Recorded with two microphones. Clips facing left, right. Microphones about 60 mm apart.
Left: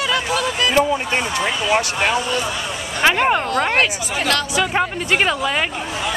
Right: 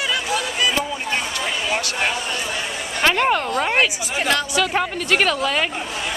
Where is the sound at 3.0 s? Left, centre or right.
Centre.